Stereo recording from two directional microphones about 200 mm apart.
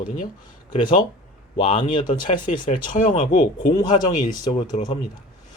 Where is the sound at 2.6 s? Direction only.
40° left (ahead or behind).